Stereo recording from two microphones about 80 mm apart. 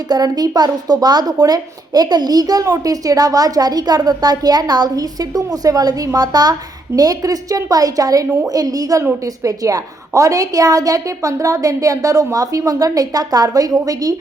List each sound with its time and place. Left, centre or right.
0.1 s speech: right